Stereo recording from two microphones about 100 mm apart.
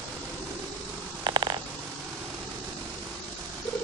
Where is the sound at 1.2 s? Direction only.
45° right (ahead or behind).